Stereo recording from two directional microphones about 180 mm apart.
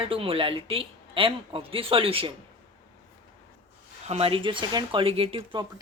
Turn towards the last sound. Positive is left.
turn(degrees=-30)  # may be behind; listen again after turning